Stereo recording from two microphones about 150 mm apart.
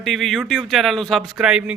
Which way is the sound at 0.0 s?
Centre (ahead or behind).